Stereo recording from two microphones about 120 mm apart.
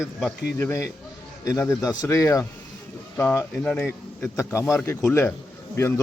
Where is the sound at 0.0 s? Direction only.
5° left (ahead or behind).